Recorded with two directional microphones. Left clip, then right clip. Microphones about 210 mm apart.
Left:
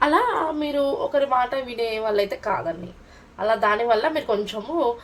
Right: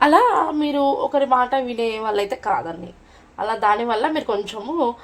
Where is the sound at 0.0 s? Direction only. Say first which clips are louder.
Right 5 dB; 50° right (ahead or behind).